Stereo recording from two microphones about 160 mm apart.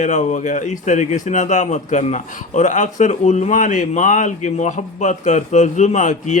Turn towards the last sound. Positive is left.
turn(degrees=50)  # may be behind; listen again after turning